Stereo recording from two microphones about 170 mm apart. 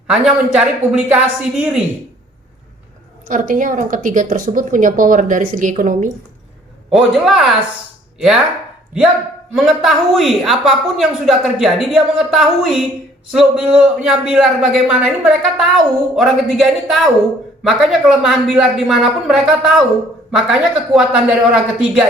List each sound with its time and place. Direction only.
0.1 s a man's voice: 5° right (ahead or behind)
3.2 s a woman's voice: 55° right (ahead or behind)
6.9 s a man's voice: centre (ahead or behind)
9.6 s a man's voice: centre (ahead or behind)